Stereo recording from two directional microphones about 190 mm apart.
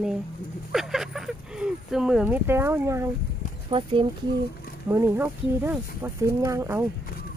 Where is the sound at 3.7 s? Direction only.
25° right (ahead or behind).